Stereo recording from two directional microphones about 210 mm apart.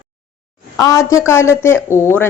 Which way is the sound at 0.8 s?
15° left (ahead or behind).